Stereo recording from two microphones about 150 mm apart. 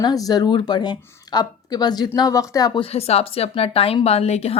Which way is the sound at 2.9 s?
40° left (ahead or behind).